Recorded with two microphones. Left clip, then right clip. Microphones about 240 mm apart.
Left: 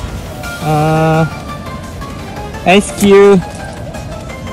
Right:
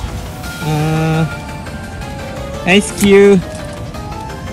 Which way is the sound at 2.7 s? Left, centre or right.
Centre.